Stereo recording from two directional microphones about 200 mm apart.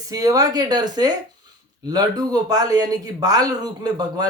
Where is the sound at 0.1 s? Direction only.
15° right (ahead or behind).